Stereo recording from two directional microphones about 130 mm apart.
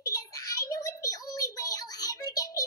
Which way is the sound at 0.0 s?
25° left (ahead or behind).